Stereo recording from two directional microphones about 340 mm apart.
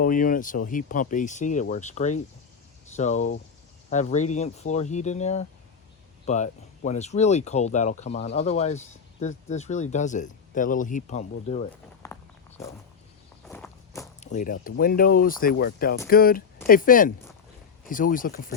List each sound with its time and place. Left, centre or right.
0.0 s speech: left
12.0 s walk: centre
14.2 s speech: left